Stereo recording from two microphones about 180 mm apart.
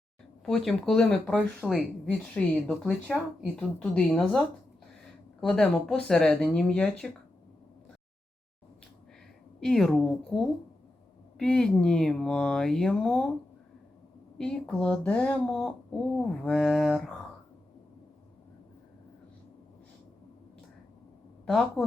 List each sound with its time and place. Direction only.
0.4 s speech: centre (ahead or behind)
9.6 s speech: centre (ahead or behind)
14.3 s speech: 5° left (ahead or behind)
21.4 s a woman's voice: centre (ahead or behind)